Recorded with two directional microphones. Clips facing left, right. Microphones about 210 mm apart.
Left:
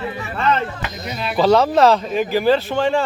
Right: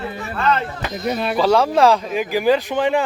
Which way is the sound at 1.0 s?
50° right (ahead or behind).